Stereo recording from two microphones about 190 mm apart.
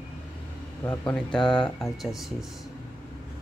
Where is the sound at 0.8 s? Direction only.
20° left (ahead or behind).